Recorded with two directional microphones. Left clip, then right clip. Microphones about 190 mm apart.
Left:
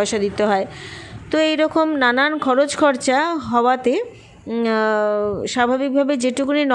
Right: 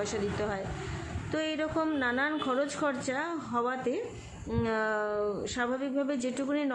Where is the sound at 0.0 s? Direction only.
45° left (ahead or behind).